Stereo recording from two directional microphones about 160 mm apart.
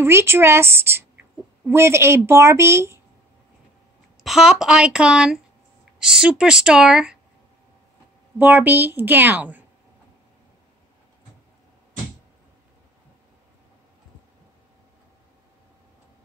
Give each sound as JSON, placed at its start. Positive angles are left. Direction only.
{"t": 0.0, "sound": "a woman's voice", "side_deg": -15}
{"t": 4.2, "sound": "speech", "side_deg": -5}
{"t": 8.4, "sound": "a woman's voice", "side_deg": -10}